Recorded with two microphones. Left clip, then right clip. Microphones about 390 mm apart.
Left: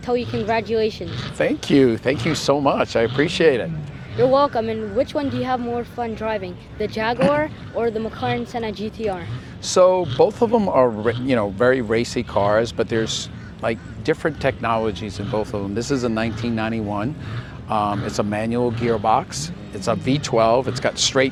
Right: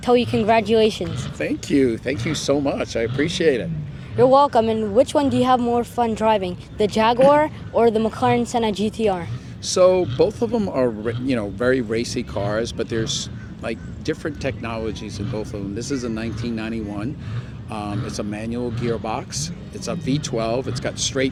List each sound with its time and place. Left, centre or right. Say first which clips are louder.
0.0 s speech: right 5 dB; right
1.4 s speech: left 3 dB; left
4.2 s speech: right 3 dB; right
9.6 s speech: left 1 dB; centre